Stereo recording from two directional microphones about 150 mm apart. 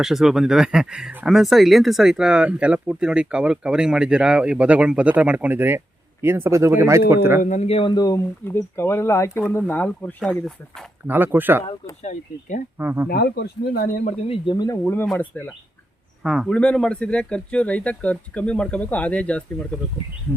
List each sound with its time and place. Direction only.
0.0 s speech: centre (ahead or behind)
7.4 s speech: 50° left (ahead or behind); by 10.8 s centre (ahead or behind)
11.0 s speech: 15° right (ahead or behind)
12.0 s speech: 55° left (ahead or behind)
12.8 s speech: 15° right (ahead or behind)
13.1 s speech: 90° left; by 14.1 s 75° left (ahead or behind)
14.3 s speech: 30° left (ahead or behind); by 15.5 s 10° left (ahead or behind)
16.2 s speech: 5° right (ahead or behind)